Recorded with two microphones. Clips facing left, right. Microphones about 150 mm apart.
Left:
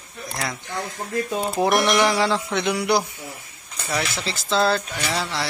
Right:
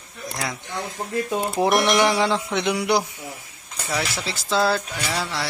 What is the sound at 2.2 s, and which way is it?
Music, 15° right (ahead or behind).